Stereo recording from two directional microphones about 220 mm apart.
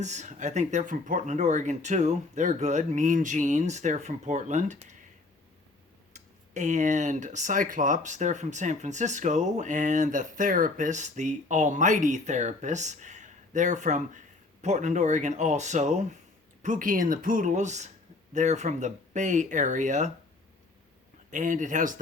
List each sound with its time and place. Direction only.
0.0 s speech: 35° right (ahead or behind)
6.1 s speech: 30° right (ahead or behind)
21.2 s speech: 35° right (ahead or behind)